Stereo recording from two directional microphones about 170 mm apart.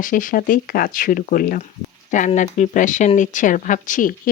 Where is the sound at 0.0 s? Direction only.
50° left (ahead or behind).